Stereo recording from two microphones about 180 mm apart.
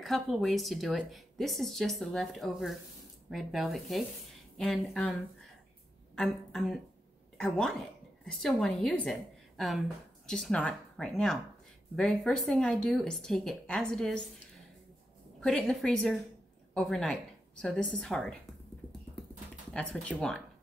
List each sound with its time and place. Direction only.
0.0 s a woman's voice: centre (ahead or behind)
15.4 s a woman's voice: 5° left (ahead or behind)
19.7 s speech: 5° left (ahead or behind)